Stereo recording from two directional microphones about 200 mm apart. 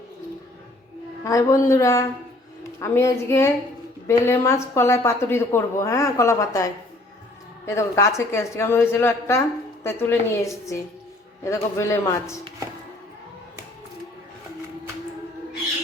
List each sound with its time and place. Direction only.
1.2 s a woman's voice: 15° left (ahead or behind)